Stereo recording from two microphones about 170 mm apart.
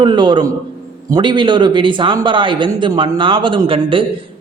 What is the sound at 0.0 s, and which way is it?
A man's voice, 25° right (ahead or behind).